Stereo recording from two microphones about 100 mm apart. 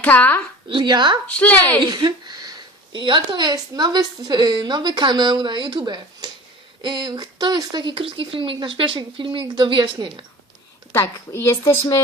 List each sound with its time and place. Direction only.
0.0 s a woman's voice: 15° left (ahead or behind)
0.7 s speech: 50° right (ahead or behind)
1.3 s a woman's voice: 15° left (ahead or behind)
1.9 s speech: 45° right (ahead or behind)
10.9 s a woman's voice: 25° left (ahead or behind)